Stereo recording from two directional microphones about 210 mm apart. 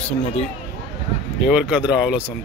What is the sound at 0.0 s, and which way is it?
Speech, 30° left (ahead or behind).